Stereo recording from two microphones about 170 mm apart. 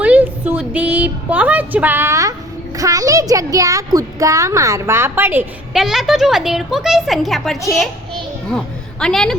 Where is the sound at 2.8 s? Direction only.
20° right (ahead or behind).